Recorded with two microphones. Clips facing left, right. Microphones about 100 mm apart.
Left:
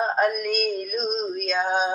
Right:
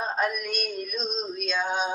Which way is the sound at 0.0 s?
45° left (ahead or behind).